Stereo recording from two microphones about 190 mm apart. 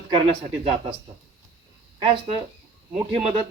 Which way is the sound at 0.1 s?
25° right (ahead or behind).